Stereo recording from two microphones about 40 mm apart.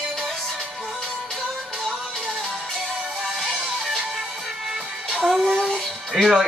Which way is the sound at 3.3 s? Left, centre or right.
Centre.